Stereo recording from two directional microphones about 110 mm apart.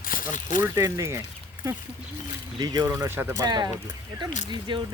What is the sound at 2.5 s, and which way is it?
Speech, 40° right (ahead or behind).